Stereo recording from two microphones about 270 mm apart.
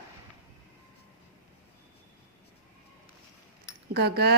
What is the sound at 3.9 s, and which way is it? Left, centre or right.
Speech, right.